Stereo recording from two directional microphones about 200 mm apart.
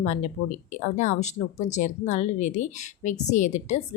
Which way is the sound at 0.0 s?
35° left (ahead or behind).